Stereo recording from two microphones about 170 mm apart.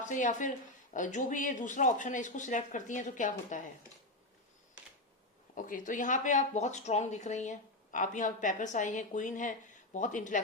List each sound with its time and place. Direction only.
0.0 s speech: 45° left (ahead or behind)
5.5 s speech: 50° left (ahead or behind)